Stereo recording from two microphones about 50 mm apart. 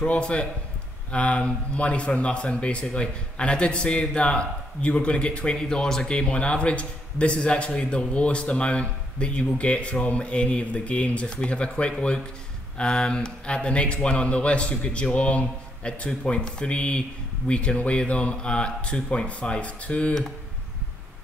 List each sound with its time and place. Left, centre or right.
0.0 s a man's voice: centre